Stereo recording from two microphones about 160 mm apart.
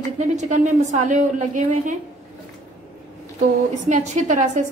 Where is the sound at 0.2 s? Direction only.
50° right (ahead or behind).